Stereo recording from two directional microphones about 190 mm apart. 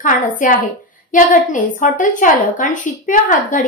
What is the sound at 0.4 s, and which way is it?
A woman's voice, 45° left (ahead or behind).